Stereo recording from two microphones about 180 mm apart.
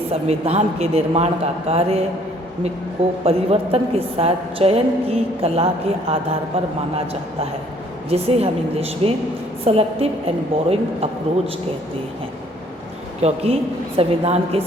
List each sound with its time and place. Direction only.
0.1 s a woman's voice: 35° right (ahead or behind)
3.2 s a woman's voice: 35° right (ahead or behind)
6.9 s a woman's voice: 35° right (ahead or behind)
13.2 s a woman's voice: 35° right (ahead or behind)